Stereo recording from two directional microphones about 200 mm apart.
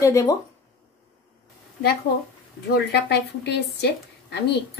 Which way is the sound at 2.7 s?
55° left (ahead or behind).